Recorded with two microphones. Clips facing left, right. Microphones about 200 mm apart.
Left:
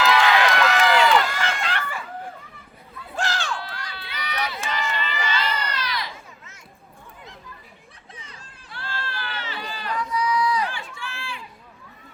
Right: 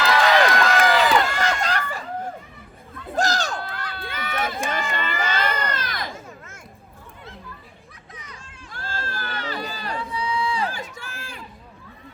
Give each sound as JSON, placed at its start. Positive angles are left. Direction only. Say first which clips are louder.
{"t": 0.1, "sound": "run", "louder": "right 4 dB", "side_deg": -40}
{"t": 3.2, "sound": "run", "louder": "right 4 dB", "side_deg": -40}
{"t": 8.1, "sound": "a sound", "louder": "right 2 dB", "side_deg": 30}
{"t": 8.7, "sound": "run", "louder": "right 1 dB", "side_deg": -45}
{"t": 9.9, "sound": "a sound", "louder": "left 4 dB", "side_deg": -30}
{"t": 10.7, "sound": "run", "louder": "right 2 dB", "side_deg": -40}